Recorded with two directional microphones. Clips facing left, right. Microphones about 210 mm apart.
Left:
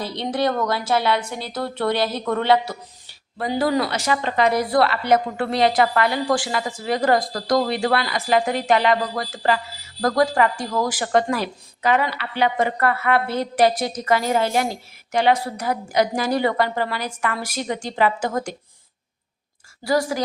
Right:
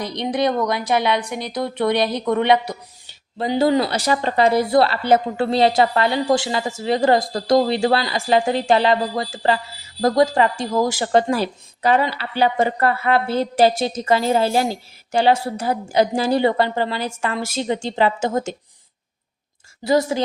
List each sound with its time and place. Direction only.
0.0 s a woman's voice: 15° right (ahead or behind)
19.8 s speech: 20° right (ahead or behind)